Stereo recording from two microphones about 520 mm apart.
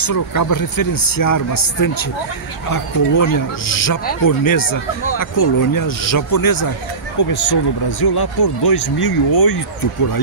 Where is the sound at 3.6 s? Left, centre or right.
Left.